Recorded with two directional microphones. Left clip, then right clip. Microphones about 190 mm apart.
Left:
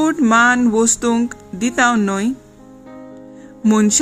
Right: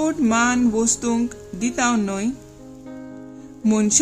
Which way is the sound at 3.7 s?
25° left (ahead or behind).